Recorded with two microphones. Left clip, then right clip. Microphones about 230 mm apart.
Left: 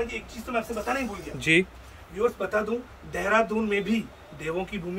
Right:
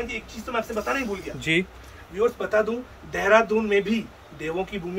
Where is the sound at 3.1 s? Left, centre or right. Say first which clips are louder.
Right 5 dB; centre.